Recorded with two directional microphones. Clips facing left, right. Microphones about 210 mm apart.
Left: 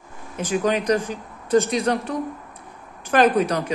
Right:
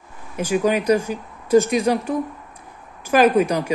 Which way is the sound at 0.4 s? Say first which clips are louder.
Right 2 dB; 10° right (ahead or behind).